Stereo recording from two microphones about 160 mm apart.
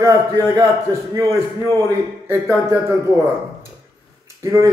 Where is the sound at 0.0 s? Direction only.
20° right (ahead or behind).